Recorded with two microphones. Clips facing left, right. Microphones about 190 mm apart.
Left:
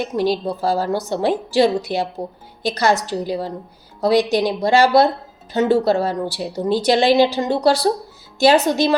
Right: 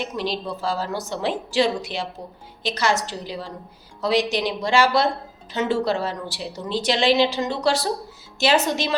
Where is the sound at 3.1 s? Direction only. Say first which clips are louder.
Left 9 dB; 40° left (ahead or behind).